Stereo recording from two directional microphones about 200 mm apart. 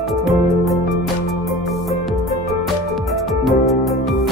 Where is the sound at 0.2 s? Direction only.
Centre (ahead or behind).